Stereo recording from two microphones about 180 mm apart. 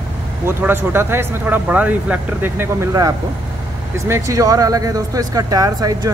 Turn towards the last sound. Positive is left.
turn(degrees=-20)  # may be behind; listen again after turning